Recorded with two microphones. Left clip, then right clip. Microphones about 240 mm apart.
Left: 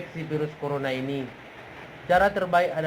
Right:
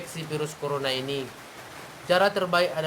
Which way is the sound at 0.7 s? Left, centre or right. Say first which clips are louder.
Right 2 dB; right.